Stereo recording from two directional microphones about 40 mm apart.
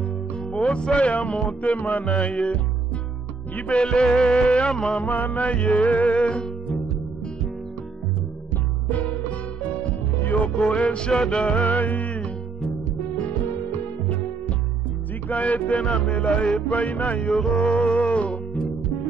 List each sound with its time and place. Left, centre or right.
0.7 s music: left
3.6 s music: left
5.0 s music: left
5.5 s music: left
6.0 s music: left
10.2 s music: left
10.7 s music: left
11.6 s music: left
15.2 s music: left
17.2 s music: centre; by 18.4 s left